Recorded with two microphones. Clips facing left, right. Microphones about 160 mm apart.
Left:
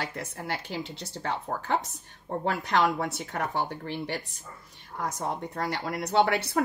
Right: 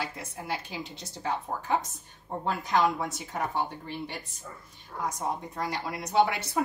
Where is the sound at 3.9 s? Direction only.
80° left.